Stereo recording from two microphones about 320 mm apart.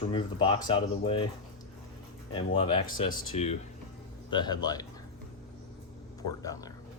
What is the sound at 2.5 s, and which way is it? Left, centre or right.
Speech, centre.